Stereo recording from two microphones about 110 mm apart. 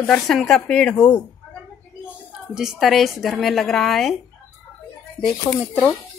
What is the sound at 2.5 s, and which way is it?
Speech, centre (ahead or behind).